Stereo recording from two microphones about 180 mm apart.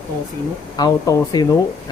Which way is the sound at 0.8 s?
20° left (ahead or behind).